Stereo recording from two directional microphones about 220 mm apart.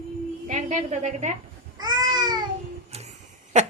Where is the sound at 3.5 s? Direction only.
30° right (ahead or behind).